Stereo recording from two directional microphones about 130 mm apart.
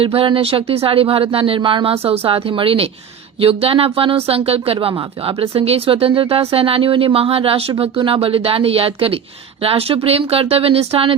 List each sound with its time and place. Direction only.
0.0 s speech: 45° right (ahead or behind)